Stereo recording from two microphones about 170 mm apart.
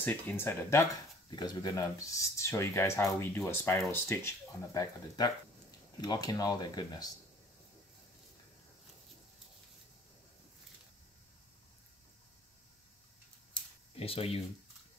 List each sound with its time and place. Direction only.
0.0 s speech: 10° left (ahead or behind)
13.9 s speech: 35° left (ahead or behind)